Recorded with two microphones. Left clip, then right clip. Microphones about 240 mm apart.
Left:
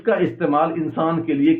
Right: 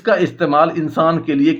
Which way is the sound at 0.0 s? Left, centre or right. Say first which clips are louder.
Right 4 dB; right.